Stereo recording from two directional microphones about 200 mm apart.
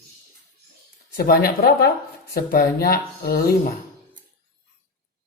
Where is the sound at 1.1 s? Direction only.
50° left (ahead or behind).